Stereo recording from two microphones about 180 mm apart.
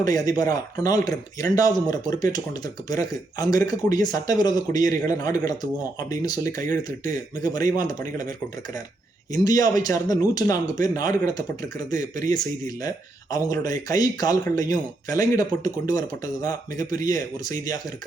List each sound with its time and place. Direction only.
0.0 s speech: 20° left (ahead or behind)
9.3 s speech: 20° left (ahead or behind)
11.9 s speech: 45° right (ahead or behind)
12.2 s speech: 20° left (ahead or behind)